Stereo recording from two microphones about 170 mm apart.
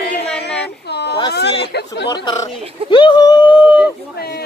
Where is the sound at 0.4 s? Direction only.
80° left.